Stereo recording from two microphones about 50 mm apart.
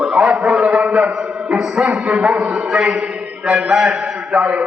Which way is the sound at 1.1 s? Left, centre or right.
Centre.